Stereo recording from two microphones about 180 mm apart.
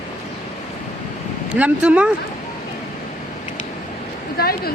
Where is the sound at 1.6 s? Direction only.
5° right (ahead or behind).